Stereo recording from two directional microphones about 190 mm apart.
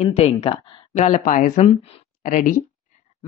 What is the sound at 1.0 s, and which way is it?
Speech, 45° left (ahead or behind).